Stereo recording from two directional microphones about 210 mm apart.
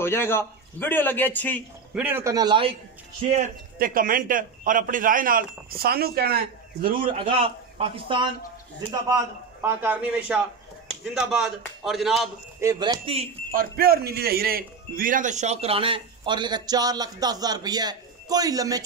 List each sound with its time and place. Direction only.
0.0 s a man's voice: 10° left (ahead or behind)
2.0 s a man's voice: 10° right (ahead or behind)
3.3 s a man's voice: 35° right (ahead or behind)
7.4 s speech: 25° right (ahead or behind)
9.1 s a man's voice: 10° right (ahead or behind)
12.5 s speech: 15° right (ahead or behind)
13.5 s speech: 45° right (ahead or behind); by 18.9 s 15° right (ahead or behind)